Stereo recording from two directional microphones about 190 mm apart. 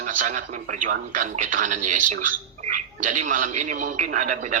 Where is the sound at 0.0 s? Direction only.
40° right (ahead or behind).